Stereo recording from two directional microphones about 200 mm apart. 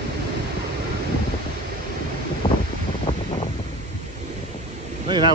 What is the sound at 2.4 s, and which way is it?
Wind noise, 25° left (ahead or behind).